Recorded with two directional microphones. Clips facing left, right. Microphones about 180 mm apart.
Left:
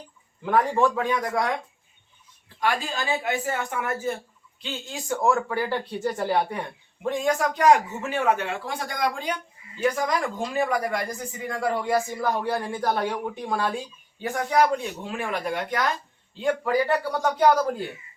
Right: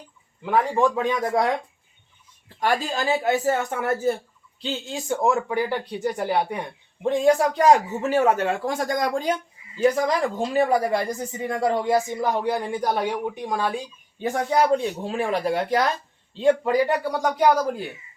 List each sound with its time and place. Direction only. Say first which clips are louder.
0.4 s speech: right 1 dB; 10° right (ahead or behind); by 1.5 s 25° right (ahead or behind)
2.6 s a man's voice: right 3 dB; 40° right (ahead or behind)
4.6 s speech: right 5 dB; 25° right (ahead or behind)
7.0 s a man's voice: right 5 dB; 25° right (ahead or behind); by 9.3 s 45° right (ahead or behind)
10.1 s speech: right 4 dB; 30° right (ahead or behind)
14.2 s a man's voice: right 1 dB; 25° right (ahead or behind); by 17.8 s 10° right (ahead or behind)